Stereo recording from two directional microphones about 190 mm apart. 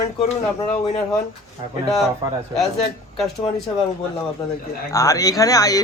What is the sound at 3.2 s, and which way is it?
Speech, centre (ahead or behind).